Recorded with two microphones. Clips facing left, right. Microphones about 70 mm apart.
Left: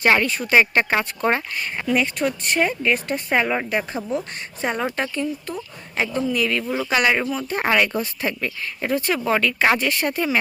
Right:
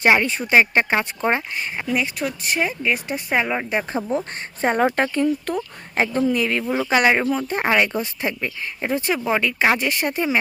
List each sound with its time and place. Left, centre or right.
0.0 s speech: right; by 3.7 s centre
3.7 s speech: right